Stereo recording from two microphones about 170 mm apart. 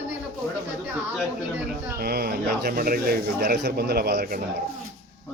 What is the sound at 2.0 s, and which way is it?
Speech, 65° right (ahead or behind).